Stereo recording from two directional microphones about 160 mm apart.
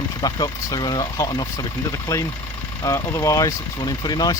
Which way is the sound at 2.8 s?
20° left (ahead or behind).